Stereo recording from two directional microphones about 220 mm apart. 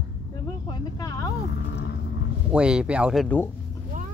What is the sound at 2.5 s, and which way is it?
Speech, 5° right (ahead or behind).